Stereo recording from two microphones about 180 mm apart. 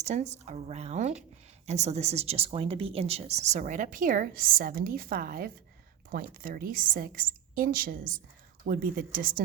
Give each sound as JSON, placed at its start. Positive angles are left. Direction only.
{"t": 0.0, "sound": "a woman's voice", "side_deg": -40}